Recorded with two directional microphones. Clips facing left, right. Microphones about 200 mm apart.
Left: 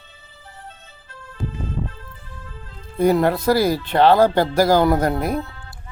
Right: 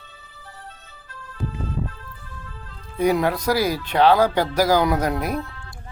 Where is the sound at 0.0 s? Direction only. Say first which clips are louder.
Right 1 dB; 25° left (ahead or behind).